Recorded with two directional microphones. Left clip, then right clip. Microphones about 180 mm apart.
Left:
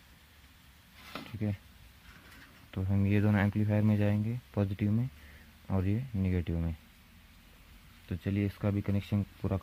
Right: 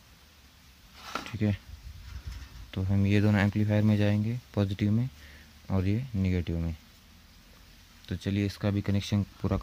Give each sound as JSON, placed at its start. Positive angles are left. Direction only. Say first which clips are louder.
{"t": 1.1, "sound": "a sound", "louder": "right 7 dB", "side_deg": -35}
{"t": 2.7, "sound": "speech", "louder": "right 4 dB", "side_deg": -10}
{"t": 8.1, "sound": "speech", "louder": "right 3 dB", "side_deg": -10}